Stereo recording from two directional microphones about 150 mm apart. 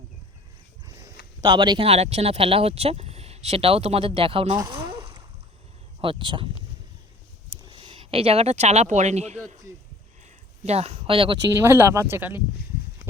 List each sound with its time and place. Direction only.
1.5 s speech: 30° right (ahead or behind)
7.7 s speech: 35° right (ahead or behind)
11.4 s speech: 20° right (ahead or behind)